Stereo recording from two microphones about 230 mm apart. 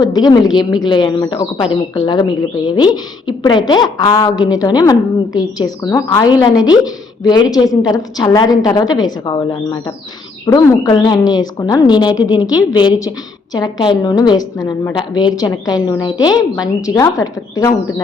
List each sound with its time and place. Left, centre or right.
0.0 s a woman's voice: centre